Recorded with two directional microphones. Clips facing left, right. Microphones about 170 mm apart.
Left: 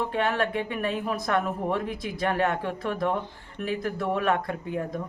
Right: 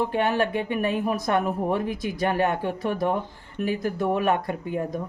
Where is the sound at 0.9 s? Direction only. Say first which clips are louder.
Right 3 dB; 15° right (ahead or behind).